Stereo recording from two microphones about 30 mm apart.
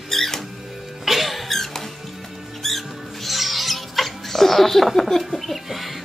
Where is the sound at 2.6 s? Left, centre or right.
Centre.